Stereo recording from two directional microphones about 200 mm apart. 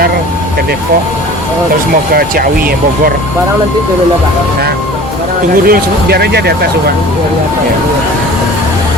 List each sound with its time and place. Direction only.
2.1 s speech: 50° right (ahead or behind)
5.6 s speech: 50° right (ahead or behind)